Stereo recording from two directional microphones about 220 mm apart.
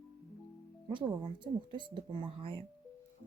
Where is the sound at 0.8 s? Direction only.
20° right (ahead or behind).